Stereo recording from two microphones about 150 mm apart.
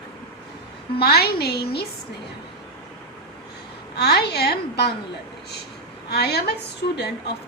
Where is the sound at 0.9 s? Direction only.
90° left.